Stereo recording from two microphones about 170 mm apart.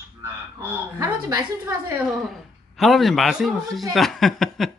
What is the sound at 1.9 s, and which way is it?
Speech, centre (ahead or behind).